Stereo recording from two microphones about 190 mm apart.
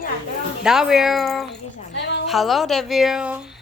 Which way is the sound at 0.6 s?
5° right (ahead or behind).